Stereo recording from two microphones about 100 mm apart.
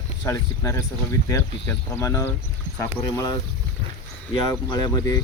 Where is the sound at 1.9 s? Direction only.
30° left (ahead or behind).